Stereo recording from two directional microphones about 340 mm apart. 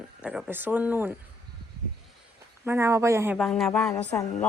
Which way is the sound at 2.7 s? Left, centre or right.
Centre.